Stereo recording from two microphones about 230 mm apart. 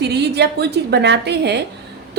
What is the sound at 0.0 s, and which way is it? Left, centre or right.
A woman's voice, right.